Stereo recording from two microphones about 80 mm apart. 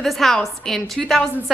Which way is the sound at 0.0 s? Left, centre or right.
Centre.